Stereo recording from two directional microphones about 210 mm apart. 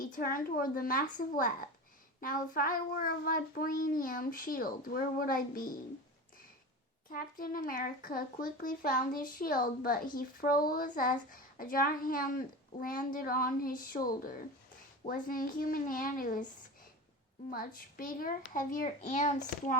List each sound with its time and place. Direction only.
0.0 s a child's voice: 40° left (ahead or behind)
7.1 s a child's voice: 45° left (ahead or behind)
17.5 s a child's voice: 45° left (ahead or behind)